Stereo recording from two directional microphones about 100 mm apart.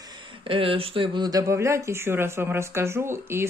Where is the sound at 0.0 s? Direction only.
50° right (ahead or behind).